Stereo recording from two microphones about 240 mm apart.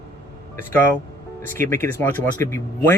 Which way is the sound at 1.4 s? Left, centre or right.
Centre.